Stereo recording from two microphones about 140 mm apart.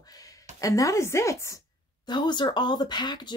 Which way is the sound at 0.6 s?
25° left (ahead or behind).